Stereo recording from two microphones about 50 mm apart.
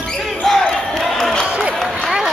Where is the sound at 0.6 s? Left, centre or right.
Centre.